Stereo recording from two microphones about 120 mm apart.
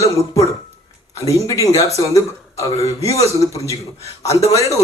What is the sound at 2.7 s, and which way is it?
Speech, 60° left (ahead or behind).